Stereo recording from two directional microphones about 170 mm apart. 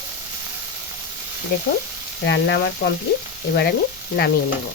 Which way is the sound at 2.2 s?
90° left.